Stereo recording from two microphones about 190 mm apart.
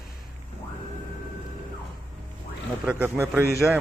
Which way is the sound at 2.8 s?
10° right (ahead or behind).